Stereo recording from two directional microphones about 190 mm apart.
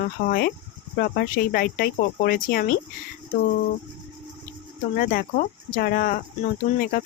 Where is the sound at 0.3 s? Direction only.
55° left (ahead or behind).